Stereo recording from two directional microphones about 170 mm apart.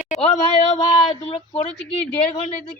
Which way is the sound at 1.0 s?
35° left (ahead or behind).